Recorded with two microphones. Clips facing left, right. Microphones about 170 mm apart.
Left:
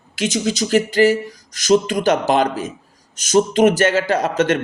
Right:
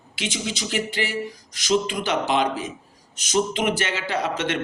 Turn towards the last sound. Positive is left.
turn(degrees=40)  # may be behind; listen again after turning